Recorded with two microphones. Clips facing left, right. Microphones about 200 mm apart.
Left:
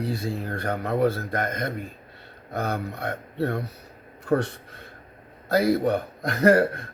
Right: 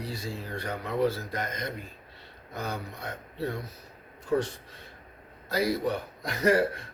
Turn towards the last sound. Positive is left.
turn(degrees=60)  # may be behind; listen again after turning